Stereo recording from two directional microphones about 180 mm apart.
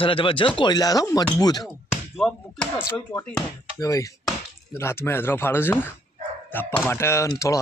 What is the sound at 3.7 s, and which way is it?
Speech, 20° left (ahead or behind).